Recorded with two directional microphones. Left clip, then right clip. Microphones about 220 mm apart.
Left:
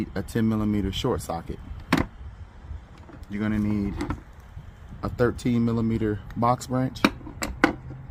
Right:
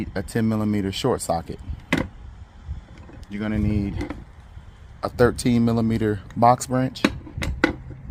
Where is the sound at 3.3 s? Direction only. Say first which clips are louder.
Right 1 dB; 25° right (ahead or behind).